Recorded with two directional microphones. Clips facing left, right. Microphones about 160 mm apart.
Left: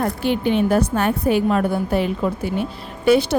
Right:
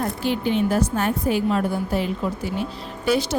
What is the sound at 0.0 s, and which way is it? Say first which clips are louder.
A woman's voice: left 3 dB; 60° left (ahead or behind).